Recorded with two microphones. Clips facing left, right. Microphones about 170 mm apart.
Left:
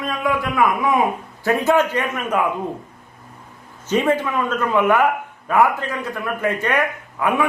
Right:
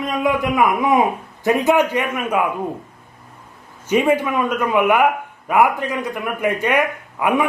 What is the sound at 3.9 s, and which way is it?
A man's voice, 10° right (ahead or behind).